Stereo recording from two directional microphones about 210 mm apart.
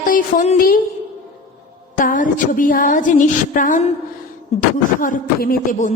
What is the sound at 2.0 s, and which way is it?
A woman's voice, 40° left (ahead or behind).